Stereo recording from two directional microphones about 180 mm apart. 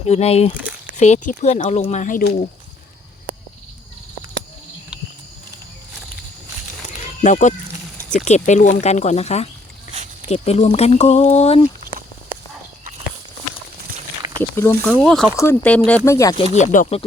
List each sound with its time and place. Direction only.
0.0 s speech: 35° left (ahead or behind)
6.8 s a sound: 40° left (ahead or behind)
8.1 s speech: 40° left (ahead or behind)
14.5 s speech: 15° left (ahead or behind)
15.0 s speech: centre (ahead or behind); by 16.3 s 15° left (ahead or behind)
16.4 s speech: 45° left (ahead or behind)